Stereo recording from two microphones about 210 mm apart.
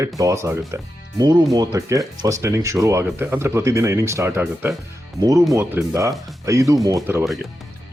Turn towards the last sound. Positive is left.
turn(degrees=-15)  # may be behind; listen again after turning